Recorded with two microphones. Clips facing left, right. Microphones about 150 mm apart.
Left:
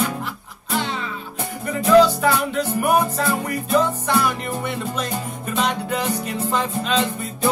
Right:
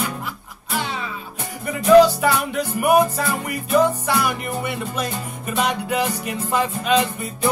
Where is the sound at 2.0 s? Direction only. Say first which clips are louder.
Right 1 dB; 10° right (ahead or behind).